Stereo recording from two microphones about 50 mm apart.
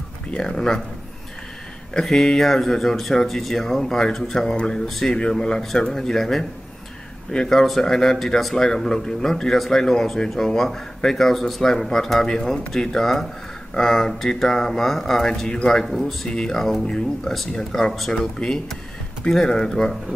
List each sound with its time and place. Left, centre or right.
0.4 s speech: centre
2.0 s speech: centre
4.8 s speech: centre
7.5 s speech: centre
15.8 s speech: centre
16.3 s speech: centre
16.5 s speech: centre